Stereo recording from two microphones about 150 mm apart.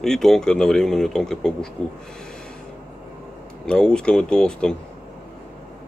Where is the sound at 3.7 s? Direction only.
5° left (ahead or behind).